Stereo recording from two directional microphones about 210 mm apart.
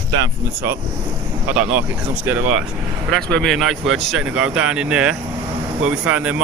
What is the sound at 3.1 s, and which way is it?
Speech, 5° left (ahead or behind).